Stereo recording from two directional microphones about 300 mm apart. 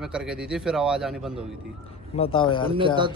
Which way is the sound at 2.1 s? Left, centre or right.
Centre.